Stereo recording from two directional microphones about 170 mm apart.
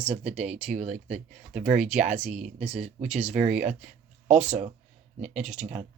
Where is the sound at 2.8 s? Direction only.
40° right (ahead or behind).